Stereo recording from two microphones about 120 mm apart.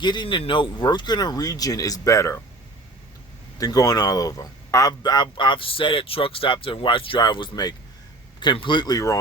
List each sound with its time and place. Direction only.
0.0 s speech: 40° left (ahead or behind); by 2.4 s 25° left (ahead or behind)
3.6 s speech: 30° left (ahead or behind)